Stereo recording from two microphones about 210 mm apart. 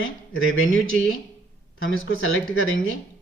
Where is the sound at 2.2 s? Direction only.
70° left (ahead or behind).